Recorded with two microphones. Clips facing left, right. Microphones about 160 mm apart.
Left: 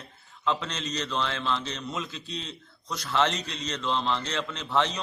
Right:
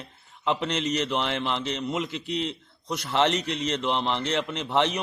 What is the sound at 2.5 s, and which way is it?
A man's voice, 25° right (ahead or behind).